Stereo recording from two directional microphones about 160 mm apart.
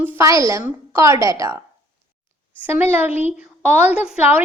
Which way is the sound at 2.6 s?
10° right (ahead or behind).